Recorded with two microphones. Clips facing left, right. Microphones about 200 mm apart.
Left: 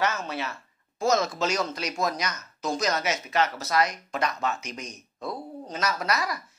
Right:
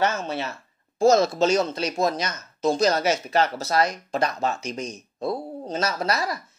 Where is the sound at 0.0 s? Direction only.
30° right (ahead or behind).